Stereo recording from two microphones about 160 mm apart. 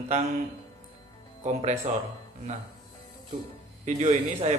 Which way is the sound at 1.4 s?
45° right (ahead or behind).